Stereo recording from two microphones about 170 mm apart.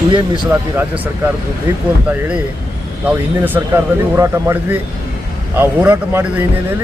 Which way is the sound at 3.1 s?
10° right (ahead or behind).